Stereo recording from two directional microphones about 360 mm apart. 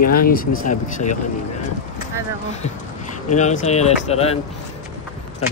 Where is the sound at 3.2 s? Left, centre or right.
Centre.